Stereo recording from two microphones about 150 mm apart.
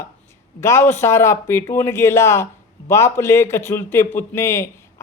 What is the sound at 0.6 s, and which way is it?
A man's voice, 15° left (ahead or behind).